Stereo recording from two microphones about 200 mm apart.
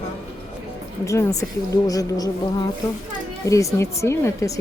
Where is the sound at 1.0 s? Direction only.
15° left (ahead or behind).